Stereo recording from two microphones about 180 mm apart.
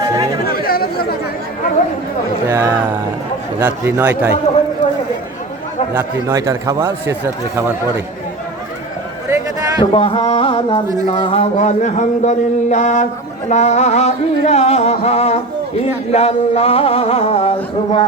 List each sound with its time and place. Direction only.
0.0 s chatter: 20° right (ahead or behind)
0.4 s chatter: 55° left (ahead or behind)
2.5 s speech: 15° right (ahead or behind)
6.0 s speech: 15° right (ahead or behind)
9.3 s a sound: 20° right (ahead or behind)
9.8 s speech: 30° left (ahead or behind)